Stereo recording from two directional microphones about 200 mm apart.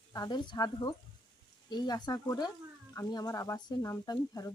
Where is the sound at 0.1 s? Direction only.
20° left (ahead or behind).